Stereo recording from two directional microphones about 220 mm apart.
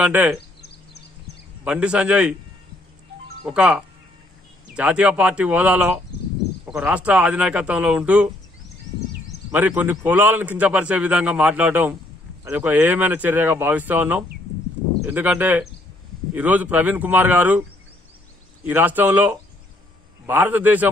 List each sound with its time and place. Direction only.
0.0 s a man's voice: 5° right (ahead or behind)
0.6 s a sound: 50° left (ahead or behind)
1.6 s speech: 5° right (ahead or behind)
3.4 s speech: 5° right (ahead or behind)
9.5 s a man's voice: 10° right (ahead or behind)